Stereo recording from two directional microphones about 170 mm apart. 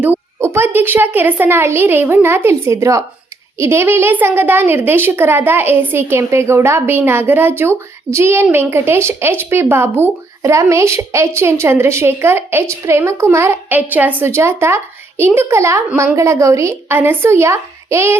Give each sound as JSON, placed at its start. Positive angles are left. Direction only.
{"t": 0.0, "sound": "a woman's voice", "side_deg": -10}